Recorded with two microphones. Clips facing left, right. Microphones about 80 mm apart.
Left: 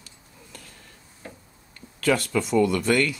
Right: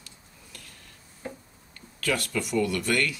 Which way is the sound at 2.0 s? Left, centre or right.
Left.